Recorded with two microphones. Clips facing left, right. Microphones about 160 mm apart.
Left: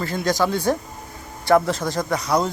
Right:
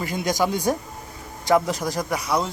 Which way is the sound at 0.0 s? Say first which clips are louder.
Left 2 dB; 15° right (ahead or behind).